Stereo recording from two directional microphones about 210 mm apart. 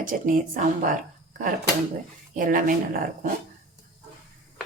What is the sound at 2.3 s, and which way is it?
A woman's voice, 40° right (ahead or behind).